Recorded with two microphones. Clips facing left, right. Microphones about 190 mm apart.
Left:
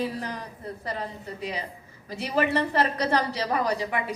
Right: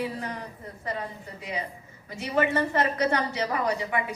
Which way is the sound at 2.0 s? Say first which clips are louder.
Even; 35° left (ahead or behind).